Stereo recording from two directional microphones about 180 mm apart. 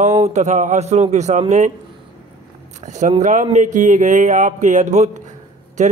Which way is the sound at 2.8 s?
40° right (ahead or behind).